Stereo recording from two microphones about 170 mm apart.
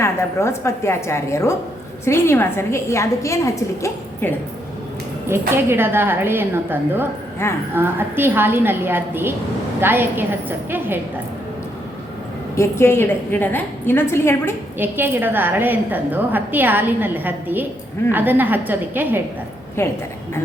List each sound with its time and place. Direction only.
0.0 s a woman's voice: 15° left (ahead or behind)
5.3 s a woman's voice: 15° right (ahead or behind)
7.4 s a woman's voice: 15° left (ahead or behind)
7.8 s a woman's voice: 10° right (ahead or behind)
12.5 s a woman's voice: 15° left (ahead or behind)
14.8 s a woman's voice: 10° right (ahead or behind)
19.8 s a woman's voice: 15° left (ahead or behind)